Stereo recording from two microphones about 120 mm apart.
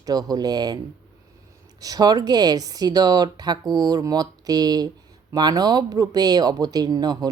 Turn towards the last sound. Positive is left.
turn(degrees=-35)  # may be behind; listen again after turning